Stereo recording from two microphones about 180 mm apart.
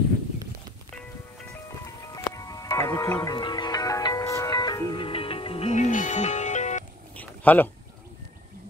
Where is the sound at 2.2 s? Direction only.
20° left (ahead or behind); by 6.8 s 40° left (ahead or behind).